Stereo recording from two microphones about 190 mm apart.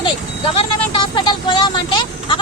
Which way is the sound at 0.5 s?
30° left (ahead or behind).